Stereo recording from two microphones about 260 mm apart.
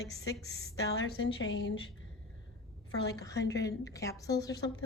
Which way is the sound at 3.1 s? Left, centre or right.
Centre.